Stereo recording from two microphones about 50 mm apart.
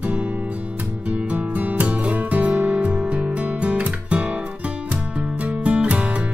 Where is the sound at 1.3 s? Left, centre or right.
Right.